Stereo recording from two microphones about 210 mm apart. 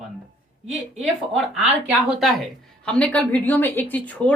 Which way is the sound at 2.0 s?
Centre (ahead or behind).